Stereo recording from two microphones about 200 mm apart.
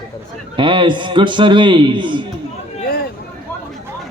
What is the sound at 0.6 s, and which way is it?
Speech, 25° right (ahead or behind).